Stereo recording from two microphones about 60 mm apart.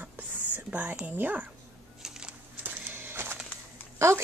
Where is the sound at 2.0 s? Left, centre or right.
Centre.